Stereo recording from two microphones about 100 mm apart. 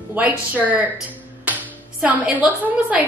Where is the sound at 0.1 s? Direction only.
15° right (ahead or behind).